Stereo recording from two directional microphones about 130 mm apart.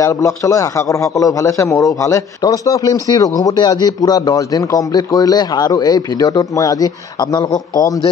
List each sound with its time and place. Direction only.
0.0 s a man's voice: 25° left (ahead or behind)